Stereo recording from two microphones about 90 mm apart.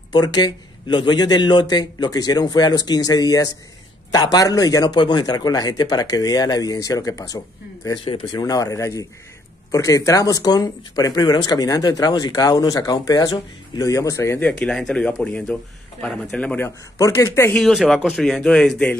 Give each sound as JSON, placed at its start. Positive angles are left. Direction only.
{"t": 0.1, "sound": "a man's voice", "side_deg": 50}
{"t": 7.9, "sound": "speech", "side_deg": 65}
{"t": 8.4, "sound": "a man's voice", "side_deg": 40}
{"t": 14.7, "sound": "speech", "side_deg": 5}
{"t": 16.3, "sound": "speech", "side_deg": 15}
{"t": 17.0, "sound": "speech", "side_deg": 35}
{"t": 17.7, "sound": "speech", "side_deg": 5}